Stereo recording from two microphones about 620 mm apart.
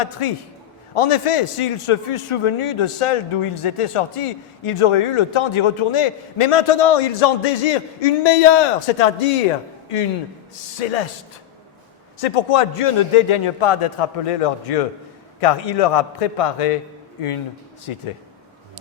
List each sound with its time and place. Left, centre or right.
0.0 s a man's voice: left
10.5 s a man's voice: left
12.2 s a man's voice: left